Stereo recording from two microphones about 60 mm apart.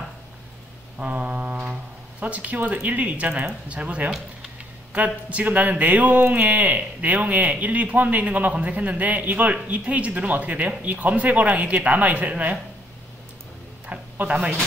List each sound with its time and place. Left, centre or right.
0.9 s a man's voice: centre
13.8 s speech: right